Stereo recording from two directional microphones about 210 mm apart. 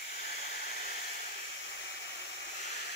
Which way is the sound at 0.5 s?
45° left (ahead or behind).